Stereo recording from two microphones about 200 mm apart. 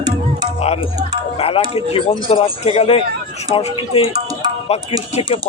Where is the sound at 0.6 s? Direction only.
30° left (ahead or behind).